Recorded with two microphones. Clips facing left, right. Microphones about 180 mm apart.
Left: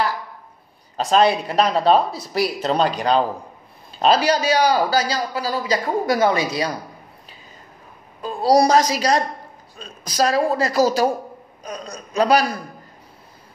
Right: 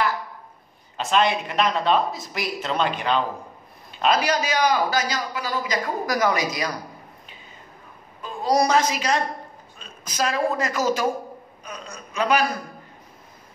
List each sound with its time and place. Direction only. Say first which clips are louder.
0.9 s a man's voice: left 5 dB; 35° left (ahead or behind)
8.2 s a man's voice: left 5 dB; 35° left (ahead or behind)